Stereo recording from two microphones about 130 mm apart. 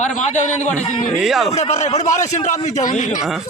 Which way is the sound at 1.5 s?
55° left (ahead or behind).